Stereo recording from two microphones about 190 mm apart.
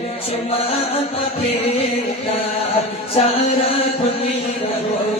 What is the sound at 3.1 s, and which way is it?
Music, 30° left (ahead or behind).